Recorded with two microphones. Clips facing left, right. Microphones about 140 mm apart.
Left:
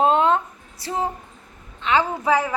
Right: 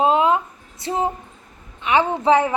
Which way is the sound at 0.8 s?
20° right (ahead or behind).